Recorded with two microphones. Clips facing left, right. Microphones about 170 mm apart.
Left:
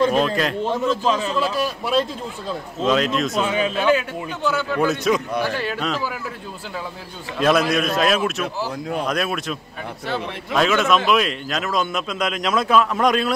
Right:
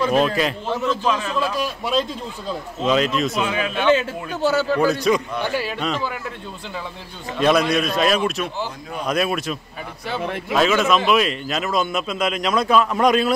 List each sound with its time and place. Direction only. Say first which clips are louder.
0.1 s speech: right 1 dB; 5° right (ahead or behind)
0.7 s a man's voice: left 1 dB; 10° left (ahead or behind)
1.0 s a man's voice: left 1 dB; 35° left (ahead or behind)
1.3 s speech: left 1 dB; 5° left (ahead or behind)
3.4 s a man's voice: left 2 dB; 35° left (ahead or behind)
4.5 s a man's voice: right 4 dB; 40° right (ahead or behind)
4.7 s speech: right 1 dB; centre (ahead or behind)
7.3 s speech: even; centre (ahead or behind)